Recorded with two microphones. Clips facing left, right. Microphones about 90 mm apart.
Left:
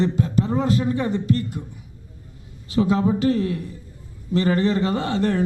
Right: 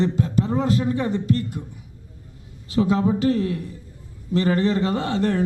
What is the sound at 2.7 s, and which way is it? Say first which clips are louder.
A man's voice: even; 15° left (ahead or behind).